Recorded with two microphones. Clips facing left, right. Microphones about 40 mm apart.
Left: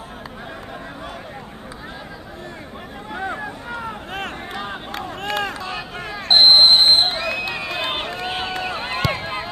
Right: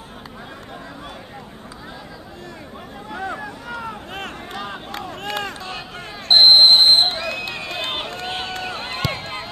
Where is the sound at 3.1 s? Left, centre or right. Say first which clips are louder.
Left 1 dB; left.